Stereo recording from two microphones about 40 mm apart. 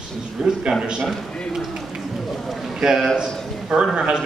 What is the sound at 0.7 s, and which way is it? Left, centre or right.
Speech, centre.